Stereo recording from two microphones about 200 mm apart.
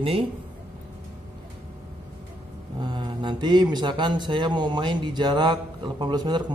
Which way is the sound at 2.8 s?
20° right (ahead or behind).